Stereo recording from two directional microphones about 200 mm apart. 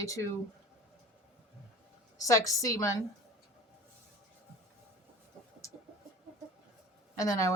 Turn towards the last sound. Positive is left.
turn(degrees=15)  # may be behind; listen again after turning